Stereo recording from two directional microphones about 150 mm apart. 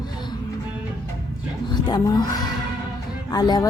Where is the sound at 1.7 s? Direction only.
30° left (ahead or behind).